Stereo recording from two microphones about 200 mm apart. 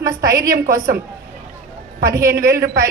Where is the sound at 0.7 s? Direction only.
45° right (ahead or behind).